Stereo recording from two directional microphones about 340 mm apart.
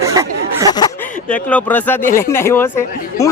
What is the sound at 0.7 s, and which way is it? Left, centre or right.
Speech, centre.